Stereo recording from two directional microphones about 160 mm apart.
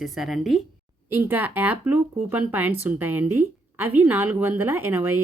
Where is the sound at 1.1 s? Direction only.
15° right (ahead or behind).